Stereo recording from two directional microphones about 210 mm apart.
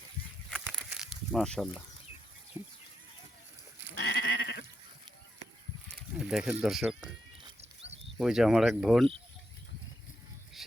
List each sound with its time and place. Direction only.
0.5 s a sound: centre (ahead or behind)
3.9 s goat: 55° left (ahead or behind)
6.1 s speech: centre (ahead or behind)
8.2 s speech: centre (ahead or behind)